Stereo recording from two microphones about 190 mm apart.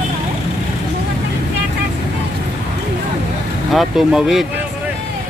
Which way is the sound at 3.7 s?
Centre (ahead or behind).